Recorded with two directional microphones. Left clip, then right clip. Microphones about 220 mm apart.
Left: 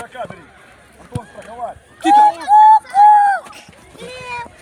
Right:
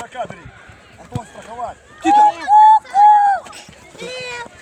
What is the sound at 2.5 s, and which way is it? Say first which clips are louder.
Run: left 1 dB; 30° left (ahead or behind).